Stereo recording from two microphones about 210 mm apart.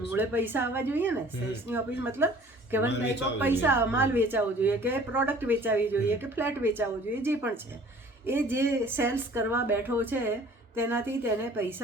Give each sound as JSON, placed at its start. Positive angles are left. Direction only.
{"t": 0.1, "sound": "speech", "side_deg": -10}
{"t": 3.3, "sound": "speech", "side_deg": -10}